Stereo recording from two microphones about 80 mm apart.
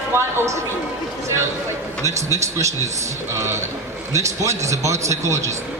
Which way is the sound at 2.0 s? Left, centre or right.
Right.